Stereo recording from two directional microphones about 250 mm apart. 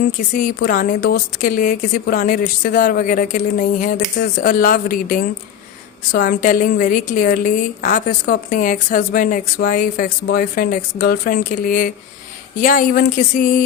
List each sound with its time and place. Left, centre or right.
0.3 s a woman's voice: left